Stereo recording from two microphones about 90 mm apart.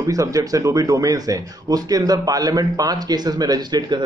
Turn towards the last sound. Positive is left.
turn(degrees=-50)  # may be behind; listen again after turning